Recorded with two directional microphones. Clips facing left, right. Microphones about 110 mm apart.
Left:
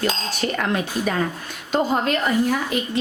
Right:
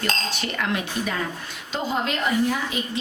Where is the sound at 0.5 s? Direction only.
45° left (ahead or behind).